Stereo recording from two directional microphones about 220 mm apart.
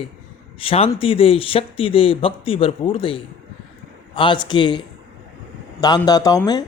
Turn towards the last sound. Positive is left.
turn(degrees=15)  # may be behind; listen again after turning